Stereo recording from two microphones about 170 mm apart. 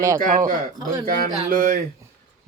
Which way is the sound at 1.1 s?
60° right (ahead or behind).